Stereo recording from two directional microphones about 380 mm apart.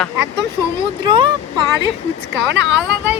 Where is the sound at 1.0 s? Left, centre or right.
Centre.